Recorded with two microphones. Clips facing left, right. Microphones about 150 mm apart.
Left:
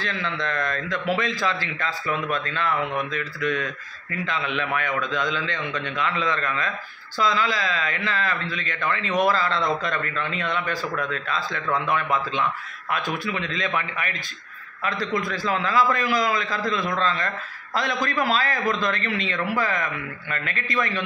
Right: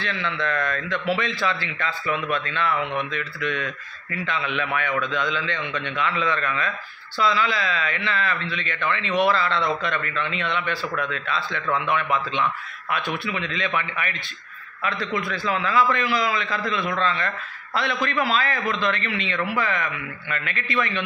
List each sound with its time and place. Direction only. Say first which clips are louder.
0.0 s a man's voice: right 1 dB; 40° left (ahead or behind)
2.8 s speech: even; centre (ahead or behind)
3.1 s speech: left 2 dB; 45° left (ahead or behind)
4.7 s a man's voice: right 2 dB; 40° left (ahead or behind)
13.2 s a man's voice: even; 40° left (ahead or behind)